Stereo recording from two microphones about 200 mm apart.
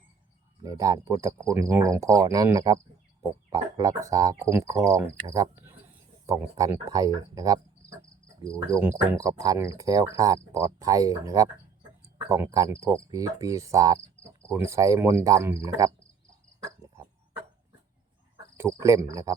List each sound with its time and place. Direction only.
0.6 s cricket: 20° right (ahead or behind)
18.5 s cricket: 15° right (ahead or behind)